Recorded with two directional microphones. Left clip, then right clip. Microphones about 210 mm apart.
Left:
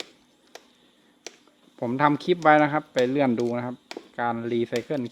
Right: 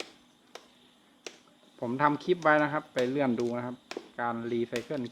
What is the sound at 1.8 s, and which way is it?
Speech, 45° left (ahead or behind).